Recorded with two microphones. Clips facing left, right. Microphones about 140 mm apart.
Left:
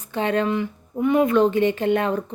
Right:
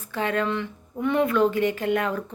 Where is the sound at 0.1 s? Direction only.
25° left (ahead or behind).